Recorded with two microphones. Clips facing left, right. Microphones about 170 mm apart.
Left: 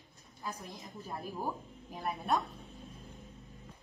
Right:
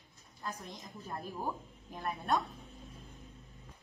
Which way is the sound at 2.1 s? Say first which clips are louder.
Even; centre (ahead or behind).